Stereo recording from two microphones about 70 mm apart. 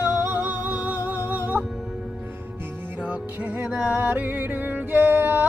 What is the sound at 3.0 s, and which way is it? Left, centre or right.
Music, centre.